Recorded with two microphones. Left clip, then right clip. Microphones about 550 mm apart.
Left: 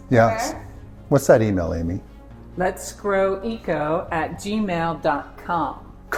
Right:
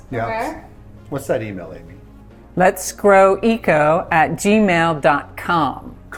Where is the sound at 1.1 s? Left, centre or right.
Left.